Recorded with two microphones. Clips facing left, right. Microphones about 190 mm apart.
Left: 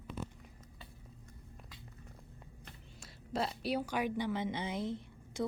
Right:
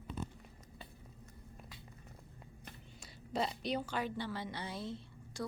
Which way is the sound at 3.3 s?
Centre (ahead or behind).